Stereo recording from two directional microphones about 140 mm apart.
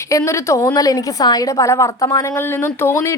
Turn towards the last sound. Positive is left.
turn(degrees=20)  # may be behind; listen again after turning